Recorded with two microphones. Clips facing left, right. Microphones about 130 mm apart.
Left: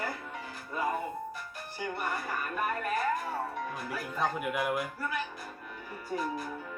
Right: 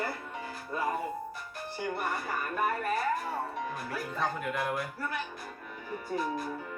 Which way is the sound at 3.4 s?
Centre (ahead or behind).